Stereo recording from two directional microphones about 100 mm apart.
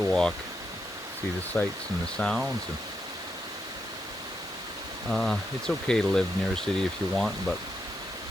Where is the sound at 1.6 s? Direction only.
20° left (ahead or behind).